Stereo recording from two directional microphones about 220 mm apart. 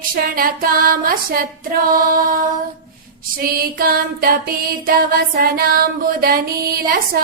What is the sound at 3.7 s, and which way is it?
Music, 40° right (ahead or behind).